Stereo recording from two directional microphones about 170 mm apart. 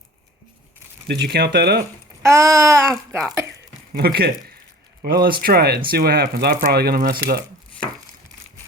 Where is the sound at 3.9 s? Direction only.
65° right (ahead or behind).